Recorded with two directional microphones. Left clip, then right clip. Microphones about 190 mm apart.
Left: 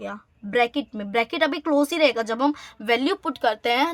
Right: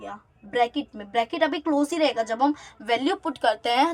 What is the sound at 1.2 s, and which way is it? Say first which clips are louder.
Speech: left 1 dB; 45° left (ahead or behind).